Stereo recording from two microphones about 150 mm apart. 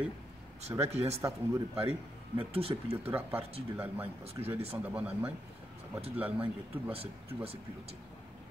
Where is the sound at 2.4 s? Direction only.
40° right (ahead or behind).